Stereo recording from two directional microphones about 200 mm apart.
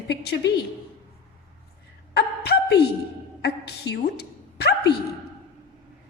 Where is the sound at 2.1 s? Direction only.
55° left (ahead or behind).